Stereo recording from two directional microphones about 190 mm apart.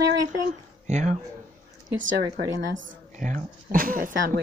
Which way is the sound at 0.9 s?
40° right (ahead or behind).